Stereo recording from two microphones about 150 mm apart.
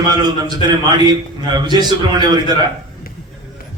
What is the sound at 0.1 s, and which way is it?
A man's voice, 30° right (ahead or behind).